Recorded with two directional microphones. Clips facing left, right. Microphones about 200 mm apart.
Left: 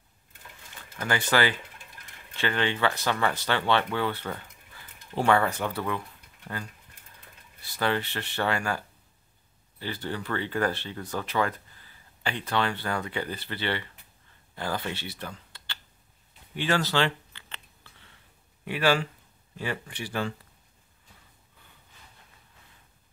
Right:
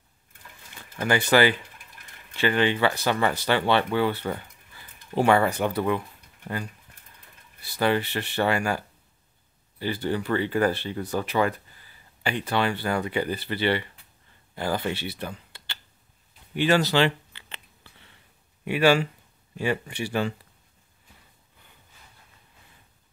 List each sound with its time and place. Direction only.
1.0 s speech: 15° right (ahead or behind)
7.7 s speech: 10° right (ahead or behind)
18.7 s speech: 15° right (ahead or behind)